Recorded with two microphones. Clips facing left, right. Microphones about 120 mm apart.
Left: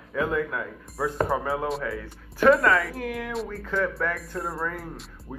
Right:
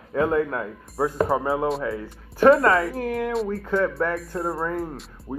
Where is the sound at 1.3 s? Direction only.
25° right (ahead or behind).